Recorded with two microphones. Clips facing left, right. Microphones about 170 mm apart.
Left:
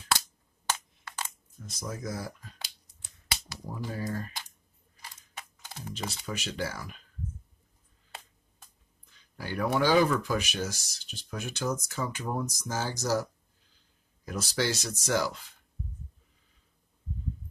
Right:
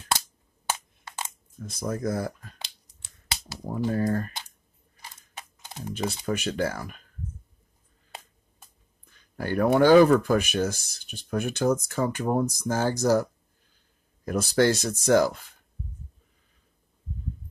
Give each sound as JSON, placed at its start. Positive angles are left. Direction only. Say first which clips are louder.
{"t": 1.0, "sound": "coin", "louder": "right 2 dB", "side_deg": -20}
{"t": 1.7, "sound": "speech", "louder": "right 8 dB", "side_deg": -55}
{"t": 2.6, "sound": "a sound", "louder": "right 3 dB", "side_deg": -25}
{"t": 3.6, "sound": "speech", "louder": "right 10 dB", "side_deg": -55}
{"t": 5.3, "sound": "a sound", "louder": "right 3 dB", "side_deg": -15}
{"t": 6.2, "sound": "speech", "louder": "right 7 dB", "side_deg": -55}
{"t": 9.4, "sound": "speech", "louder": "right 7 dB", "side_deg": -50}